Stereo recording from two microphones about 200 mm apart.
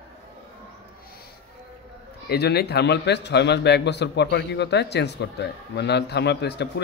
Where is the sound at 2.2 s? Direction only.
55° left (ahead or behind).